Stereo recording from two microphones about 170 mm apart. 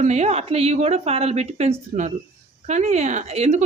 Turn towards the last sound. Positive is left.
turn(degrees=-40)  # may be behind; listen again after turning